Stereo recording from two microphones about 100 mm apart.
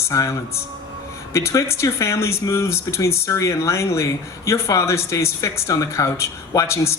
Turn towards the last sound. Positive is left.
turn(degrees=30)  # may be behind; listen again after turning